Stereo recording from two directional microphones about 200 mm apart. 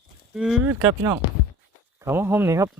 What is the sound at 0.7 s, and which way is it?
Speech, 15° right (ahead or behind).